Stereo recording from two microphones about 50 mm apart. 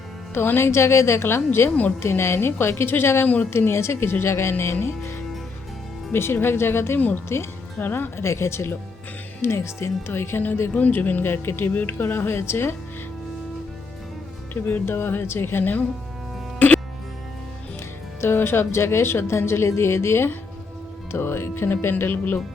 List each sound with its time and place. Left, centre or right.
0.3 s a woman's voice: left
6.1 s a woman's voice: left
8.2 s a woman's voice: left
10.9 s speech: left
11.7 s speech: left
14.5 s speech: left
16.6 s music: left
18.2 s speech: left
18.7 s a woman's voice: left